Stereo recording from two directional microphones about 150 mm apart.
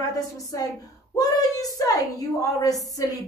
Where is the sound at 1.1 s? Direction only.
25° left (ahead or behind).